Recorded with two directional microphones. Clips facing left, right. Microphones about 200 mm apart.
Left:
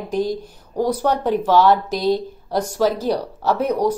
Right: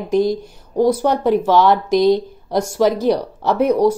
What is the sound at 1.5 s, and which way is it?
A woman's voice, 10° left (ahead or behind).